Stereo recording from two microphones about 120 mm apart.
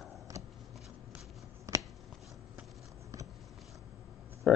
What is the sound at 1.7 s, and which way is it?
Shuffling cards, 25° right (ahead or behind).